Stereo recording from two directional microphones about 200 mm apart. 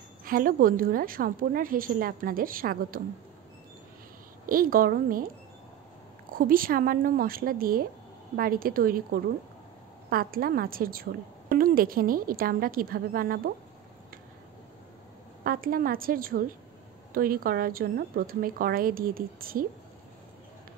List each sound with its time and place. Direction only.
0.2 s a woman's voice: 45° right (ahead or behind)
4.5 s a woman's voice: 45° right (ahead or behind)
6.3 s a woman's voice: 45° right (ahead or behind)
15.4 s a woman's voice: 45° right (ahead or behind)